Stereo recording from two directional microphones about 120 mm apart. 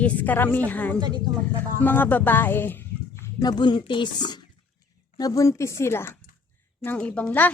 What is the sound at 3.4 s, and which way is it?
A woman's voice, 35° left (ahead or behind).